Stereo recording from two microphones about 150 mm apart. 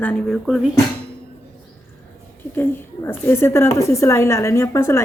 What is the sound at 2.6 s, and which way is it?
A woman's voice, 15° left (ahead or behind).